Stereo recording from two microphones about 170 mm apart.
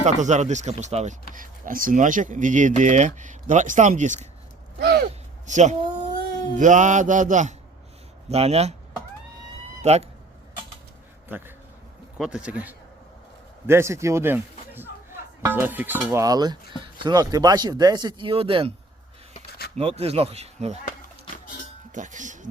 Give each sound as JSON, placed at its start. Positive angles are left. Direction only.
{"t": 0.0, "sound": "speech", "side_deg": -45}
{"t": 4.8, "sound": "a sound", "side_deg": -90}
{"t": 5.5, "sound": "speech", "side_deg": -45}
{"t": 9.8, "sound": "speech", "side_deg": -40}
{"t": 11.3, "sound": "a man's voice", "side_deg": -10}
{"t": 16.2, "sound": "speech", "side_deg": -25}
{"t": 19.7, "sound": "speech", "side_deg": -35}
{"t": 21.9, "sound": "speech", "side_deg": -45}